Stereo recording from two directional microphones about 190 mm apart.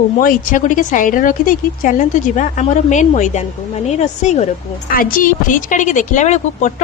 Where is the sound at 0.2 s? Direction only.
45° left (ahead or behind).